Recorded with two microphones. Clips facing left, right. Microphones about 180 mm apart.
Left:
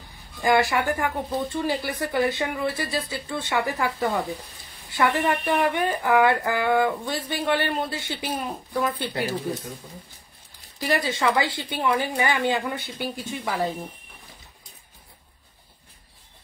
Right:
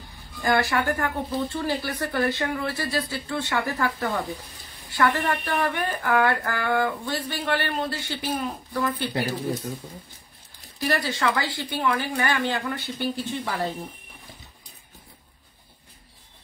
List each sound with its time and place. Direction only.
0.4 s speech: 15° left (ahead or behind)
10.8 s speech: 20° left (ahead or behind)